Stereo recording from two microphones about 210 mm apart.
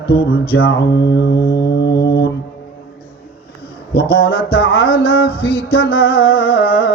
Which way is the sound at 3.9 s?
50° left (ahead or behind).